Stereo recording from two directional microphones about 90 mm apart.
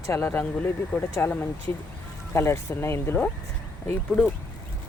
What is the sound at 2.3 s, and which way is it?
Speech, 30° left (ahead or behind).